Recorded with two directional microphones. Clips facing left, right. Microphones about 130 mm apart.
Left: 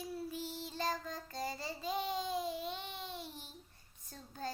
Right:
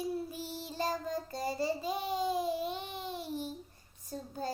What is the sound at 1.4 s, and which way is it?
Babbling, 10° right (ahead or behind).